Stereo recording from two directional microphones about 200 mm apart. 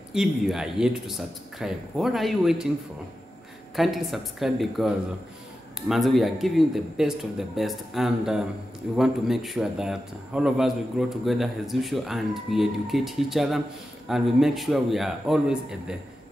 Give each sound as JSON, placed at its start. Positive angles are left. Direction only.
{"t": 0.1, "sound": "a man's voice", "side_deg": 0}
{"t": 3.7, "sound": "a man's voice", "side_deg": 0}